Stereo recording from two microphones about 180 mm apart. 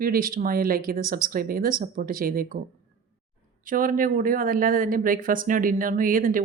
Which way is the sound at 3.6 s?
50° right (ahead or behind).